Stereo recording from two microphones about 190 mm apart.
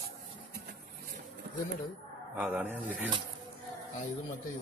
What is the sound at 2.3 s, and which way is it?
Speech, 10° right (ahead or behind).